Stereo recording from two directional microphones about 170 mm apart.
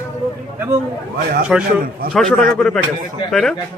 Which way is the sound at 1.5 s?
5° right (ahead or behind).